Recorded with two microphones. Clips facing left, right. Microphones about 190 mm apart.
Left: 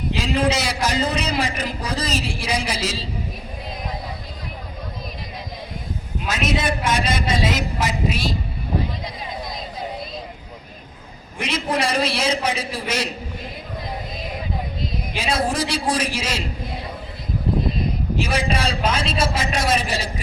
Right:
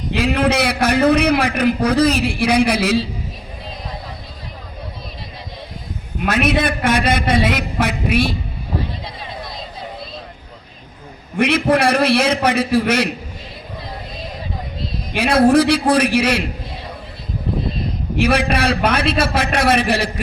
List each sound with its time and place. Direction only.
0.1 s a man's voice: 60° right (ahead or behind)
6.1 s a man's voice: 60° right (ahead or behind)
11.3 s a man's voice: 60° right (ahead or behind)
15.1 s a man's voice: 60° right (ahead or behind)
18.2 s a man's voice: 60° right (ahead or behind)